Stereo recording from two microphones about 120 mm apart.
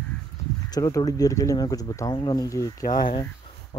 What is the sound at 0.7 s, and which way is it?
Speech, 30° left (ahead or behind).